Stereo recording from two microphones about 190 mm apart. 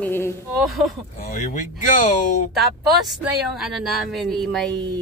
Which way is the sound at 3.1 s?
Centre (ahead or behind).